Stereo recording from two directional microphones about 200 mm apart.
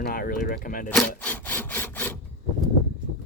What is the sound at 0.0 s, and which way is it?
Speech, 45° left (ahead or behind).